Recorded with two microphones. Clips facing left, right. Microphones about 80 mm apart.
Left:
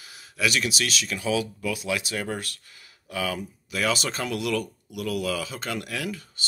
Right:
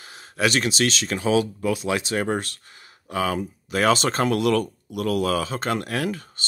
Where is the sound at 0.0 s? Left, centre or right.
Right.